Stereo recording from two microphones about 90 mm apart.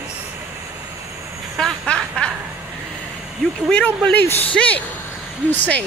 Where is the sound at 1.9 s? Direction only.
5° left (ahead or behind).